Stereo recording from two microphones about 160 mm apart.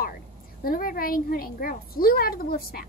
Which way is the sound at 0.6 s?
65° left (ahead or behind).